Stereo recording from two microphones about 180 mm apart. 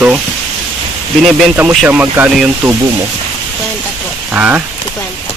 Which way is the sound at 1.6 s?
5° right (ahead or behind).